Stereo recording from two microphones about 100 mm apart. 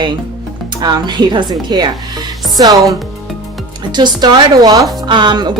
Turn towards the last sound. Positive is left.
turn(degrees=-45)  # may be behind; listen again after turning